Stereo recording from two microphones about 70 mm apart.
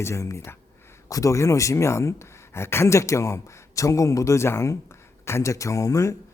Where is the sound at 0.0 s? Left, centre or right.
Left.